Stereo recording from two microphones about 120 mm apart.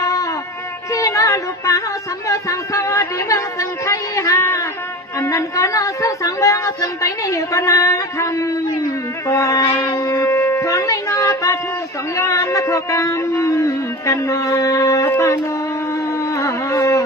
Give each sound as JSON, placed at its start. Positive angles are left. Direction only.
{"t": 0.0, "sound": "a sound", "side_deg": 30}
{"t": 2.2, "sound": "speech", "side_deg": 25}
{"t": 9.6, "sound": "shofar", "side_deg": 35}
{"t": 10.1, "sound": "shofar", "side_deg": 20}
{"t": 12.1, "sound": "speech", "side_deg": 25}
{"t": 16.3, "sound": "a sound", "side_deg": 25}